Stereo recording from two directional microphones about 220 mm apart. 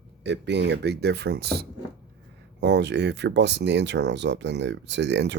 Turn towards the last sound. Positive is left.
turn(degrees=-50)  # may be behind; listen again after turning